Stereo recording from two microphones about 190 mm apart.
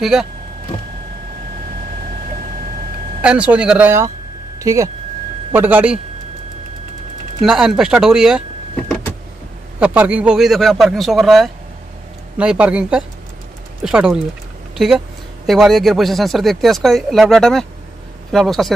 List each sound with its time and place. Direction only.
0.0 s speech: centre (ahead or behind)
3.2 s speech: 5° right (ahead or behind)
7.4 s speech: centre (ahead or behind)
15.4 s speech: centre (ahead or behind)